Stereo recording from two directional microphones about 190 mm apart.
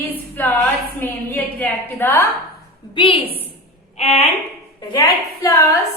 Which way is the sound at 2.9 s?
25° left (ahead or behind).